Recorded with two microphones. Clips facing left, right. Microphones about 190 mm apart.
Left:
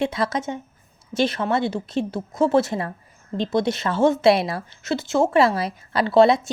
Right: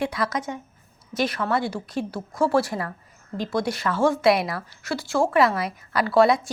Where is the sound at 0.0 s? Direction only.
25° left (ahead or behind).